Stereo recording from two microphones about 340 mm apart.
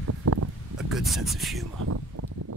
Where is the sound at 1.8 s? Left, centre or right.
Right.